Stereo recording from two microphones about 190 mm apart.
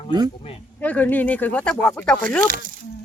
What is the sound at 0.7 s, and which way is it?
Speech, 10° left (ahead or behind).